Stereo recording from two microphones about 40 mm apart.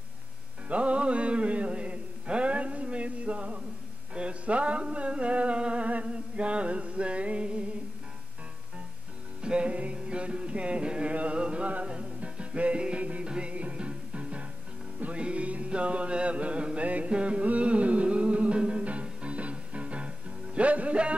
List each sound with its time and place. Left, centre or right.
0.7 s music: right
4.1 s a sound: right
6.1 s music: right
9.4 s music: right